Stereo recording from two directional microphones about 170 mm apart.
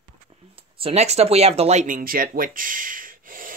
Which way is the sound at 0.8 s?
35° right (ahead or behind).